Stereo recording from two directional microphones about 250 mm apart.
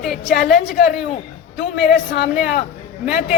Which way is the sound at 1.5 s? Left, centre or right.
Left.